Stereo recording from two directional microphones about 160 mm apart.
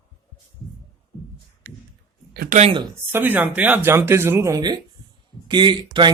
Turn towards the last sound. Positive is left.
turn(degrees=-30)  # may be behind; listen again after turning